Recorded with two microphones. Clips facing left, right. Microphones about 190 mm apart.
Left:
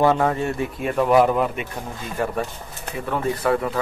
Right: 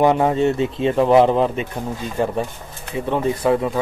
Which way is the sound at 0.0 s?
20° right (ahead or behind).